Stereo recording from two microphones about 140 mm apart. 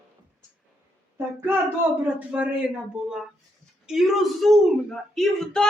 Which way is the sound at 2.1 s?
10° right (ahead or behind).